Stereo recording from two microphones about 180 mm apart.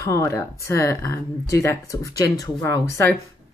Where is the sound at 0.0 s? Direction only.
15° left (ahead or behind).